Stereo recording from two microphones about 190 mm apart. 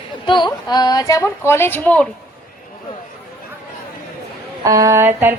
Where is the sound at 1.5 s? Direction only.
10° left (ahead or behind).